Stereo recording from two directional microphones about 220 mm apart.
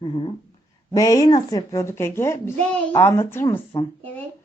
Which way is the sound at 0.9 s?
15° left (ahead or behind).